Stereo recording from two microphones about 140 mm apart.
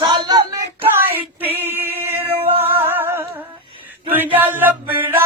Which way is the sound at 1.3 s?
15° right (ahead or behind).